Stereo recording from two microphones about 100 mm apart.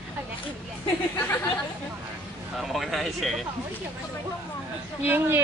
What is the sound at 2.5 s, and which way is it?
Speech, centre (ahead or behind).